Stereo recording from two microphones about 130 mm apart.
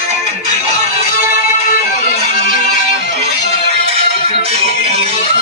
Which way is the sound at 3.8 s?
55° right (ahead or behind).